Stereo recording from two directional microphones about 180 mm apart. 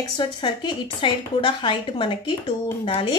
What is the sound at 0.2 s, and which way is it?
Speech, 25° left (ahead or behind).